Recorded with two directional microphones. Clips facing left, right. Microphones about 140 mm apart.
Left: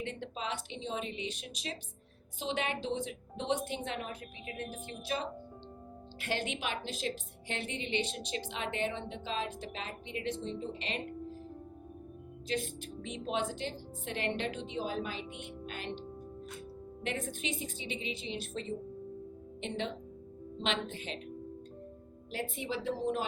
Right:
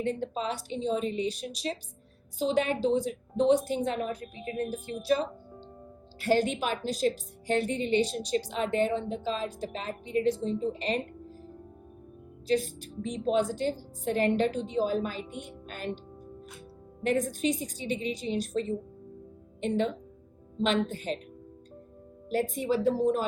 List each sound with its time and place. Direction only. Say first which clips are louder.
0.0 s a woman's voice: right 8 dB; 40° right (ahead or behind)
12.5 s a woman's voice: right 8 dB; 40° right (ahead or behind)
17.0 s a woman's voice: right 10 dB; 40° right (ahead or behind)
22.3 s speech: right 10 dB; 45° right (ahead or behind)